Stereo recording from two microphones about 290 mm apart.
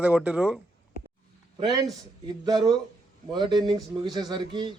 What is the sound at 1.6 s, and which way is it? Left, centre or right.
A man's voice, centre.